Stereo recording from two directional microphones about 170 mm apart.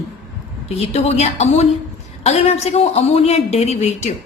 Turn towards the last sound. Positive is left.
turn(degrees=40)  # may be behind; listen again after turning